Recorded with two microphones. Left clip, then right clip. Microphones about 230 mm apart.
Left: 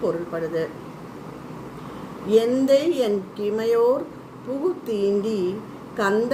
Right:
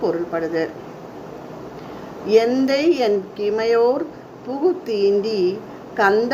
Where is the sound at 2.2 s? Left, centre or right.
Centre.